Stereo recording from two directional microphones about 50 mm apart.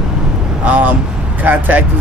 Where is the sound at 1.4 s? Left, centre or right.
Right.